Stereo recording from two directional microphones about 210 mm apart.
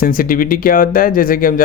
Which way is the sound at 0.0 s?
45° left (ahead or behind).